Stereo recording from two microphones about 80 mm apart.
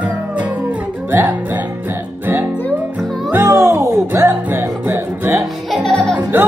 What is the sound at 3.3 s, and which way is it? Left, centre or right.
Music, right.